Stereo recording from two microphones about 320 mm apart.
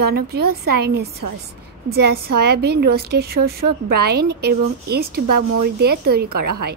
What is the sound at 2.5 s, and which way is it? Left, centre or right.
Speech, right.